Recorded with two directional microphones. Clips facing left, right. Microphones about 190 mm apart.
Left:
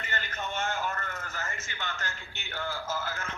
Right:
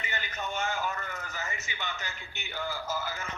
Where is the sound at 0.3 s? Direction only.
Centre (ahead or behind).